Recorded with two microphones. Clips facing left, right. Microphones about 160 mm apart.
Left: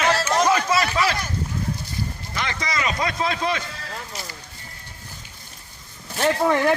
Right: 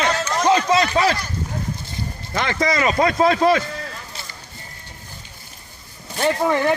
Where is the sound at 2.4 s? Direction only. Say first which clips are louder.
Right 7 dB; 50° right (ahead or behind).